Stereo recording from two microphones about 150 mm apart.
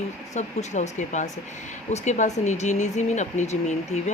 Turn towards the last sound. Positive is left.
turn(degrees=50)  # may be behind; listen again after turning